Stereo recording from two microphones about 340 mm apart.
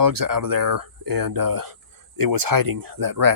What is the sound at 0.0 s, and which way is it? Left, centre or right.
Speech, right.